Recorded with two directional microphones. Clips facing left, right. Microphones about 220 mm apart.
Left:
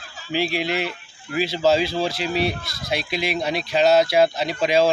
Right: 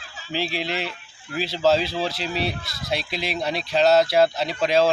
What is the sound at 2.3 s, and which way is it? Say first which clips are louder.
Speech: left 4 dB; 45° left (ahead or behind).